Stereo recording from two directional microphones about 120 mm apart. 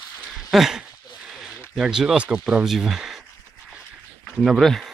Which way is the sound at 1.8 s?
5° right (ahead or behind).